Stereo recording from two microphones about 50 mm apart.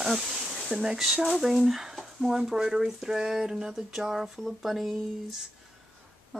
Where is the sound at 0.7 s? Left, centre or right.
Centre.